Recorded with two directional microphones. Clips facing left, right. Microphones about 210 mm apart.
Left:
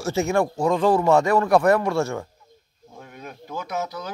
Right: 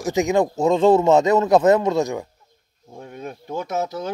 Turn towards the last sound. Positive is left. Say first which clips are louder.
# right 4 dB
turn(degrees=-30)  # may be behind; listen again after turning